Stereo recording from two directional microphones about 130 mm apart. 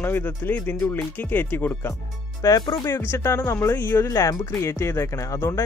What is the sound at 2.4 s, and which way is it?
Speech, 30° left (ahead or behind).